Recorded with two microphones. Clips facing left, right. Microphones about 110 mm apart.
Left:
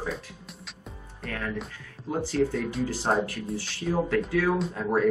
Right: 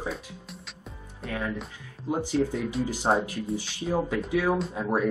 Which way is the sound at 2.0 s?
15° right (ahead or behind).